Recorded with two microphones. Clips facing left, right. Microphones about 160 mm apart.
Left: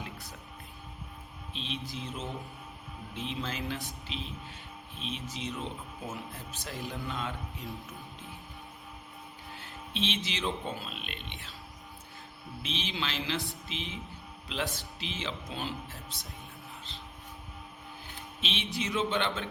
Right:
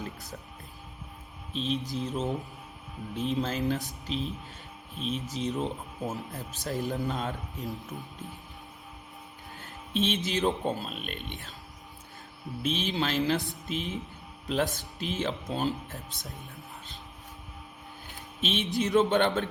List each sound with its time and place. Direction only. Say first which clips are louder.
1.5 s a man's voice: right 8 dB; 40° right (ahead or behind)
9.6 s speech: right 6 dB; 45° right (ahead or behind)
12.6 s a man's voice: right 7 dB; 45° right (ahead or behind)
18.3 s a man's voice: right 7 dB; 45° right (ahead or behind)